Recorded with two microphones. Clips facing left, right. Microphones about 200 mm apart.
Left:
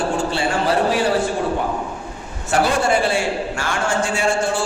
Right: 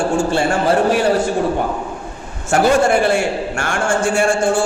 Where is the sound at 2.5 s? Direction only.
55° right (ahead or behind).